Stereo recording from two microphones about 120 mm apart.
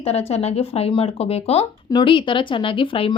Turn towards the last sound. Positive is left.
turn(degrees=45)  # may be behind; listen again after turning